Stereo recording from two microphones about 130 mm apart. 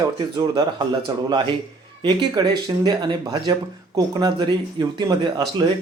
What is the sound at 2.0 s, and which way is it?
Speech, 30° right (ahead or behind).